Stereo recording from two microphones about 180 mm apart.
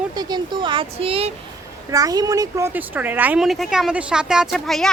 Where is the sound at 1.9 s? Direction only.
20° right (ahead or behind).